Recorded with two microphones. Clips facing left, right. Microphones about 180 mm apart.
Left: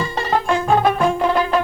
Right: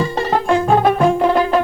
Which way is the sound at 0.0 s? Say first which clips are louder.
Right 3 dB; 40° right (ahead or behind).